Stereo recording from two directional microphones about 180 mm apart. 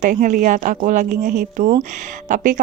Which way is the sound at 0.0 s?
45° right (ahead or behind).